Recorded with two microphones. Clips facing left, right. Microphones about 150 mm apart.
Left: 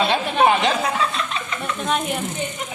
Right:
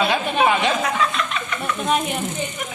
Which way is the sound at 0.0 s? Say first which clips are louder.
Left 1 dB; 30° left (ahead or behind).